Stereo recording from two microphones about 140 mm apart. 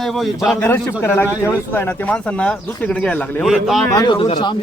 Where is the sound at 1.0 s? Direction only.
20° left (ahead or behind).